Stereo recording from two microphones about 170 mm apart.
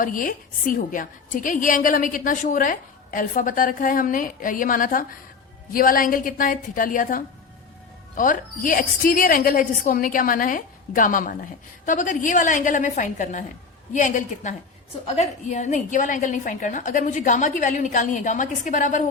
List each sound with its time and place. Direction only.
0.0 s a woman's voice: 55° left (ahead or behind)